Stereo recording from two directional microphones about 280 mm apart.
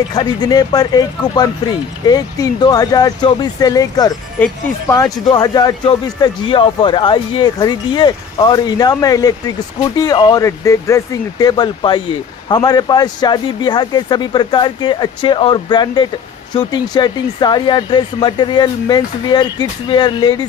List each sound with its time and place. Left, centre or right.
0.1 s speech: centre